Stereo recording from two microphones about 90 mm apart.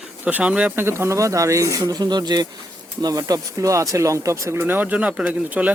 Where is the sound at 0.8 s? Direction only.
30° right (ahead or behind).